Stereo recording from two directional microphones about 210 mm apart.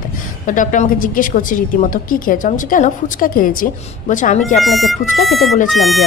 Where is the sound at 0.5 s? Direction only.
40° left (ahead or behind).